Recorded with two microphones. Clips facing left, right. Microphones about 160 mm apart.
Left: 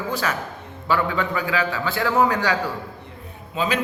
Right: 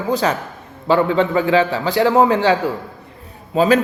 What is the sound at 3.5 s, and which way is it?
Speech, 40° right (ahead or behind).